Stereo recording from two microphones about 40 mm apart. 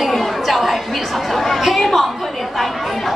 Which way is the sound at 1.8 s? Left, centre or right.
Centre.